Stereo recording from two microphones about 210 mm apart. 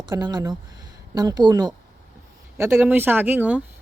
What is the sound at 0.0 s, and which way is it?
A woman's voice, 20° right (ahead or behind).